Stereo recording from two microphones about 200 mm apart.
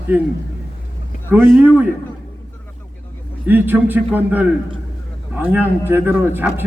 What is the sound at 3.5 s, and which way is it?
A man's voice, 10° right (ahead or behind).